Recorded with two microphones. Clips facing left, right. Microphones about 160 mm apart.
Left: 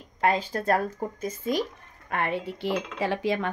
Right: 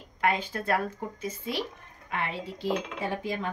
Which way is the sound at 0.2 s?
35° left (ahead or behind).